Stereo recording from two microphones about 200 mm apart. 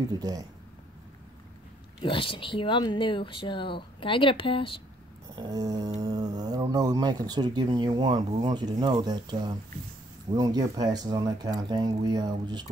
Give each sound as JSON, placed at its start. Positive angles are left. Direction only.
{"t": 0.1, "sound": "speech", "side_deg": -20}
{"t": 2.0, "sound": "speech", "side_deg": 25}
{"t": 5.3, "sound": "speech", "side_deg": -20}